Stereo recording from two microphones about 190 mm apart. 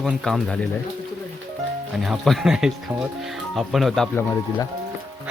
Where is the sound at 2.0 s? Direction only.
Centre (ahead or behind).